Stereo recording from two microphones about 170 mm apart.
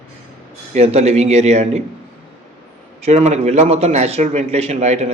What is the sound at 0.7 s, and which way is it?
A man's voice, 40° right (ahead or behind).